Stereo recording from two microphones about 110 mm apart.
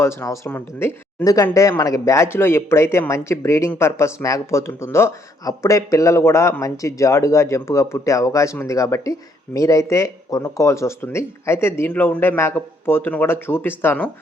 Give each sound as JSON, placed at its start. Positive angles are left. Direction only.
{"t": 0.0, "sound": "speech", "side_deg": 25}
{"t": 1.2, "sound": "speech", "side_deg": 30}